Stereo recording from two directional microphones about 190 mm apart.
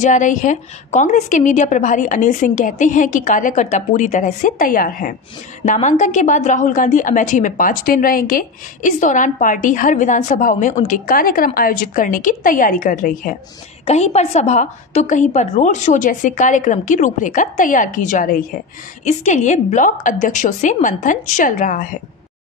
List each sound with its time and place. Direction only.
0.0 s a woman's voice: 40° left (ahead or behind)
13.8 s a woman's voice: 35° left (ahead or behind)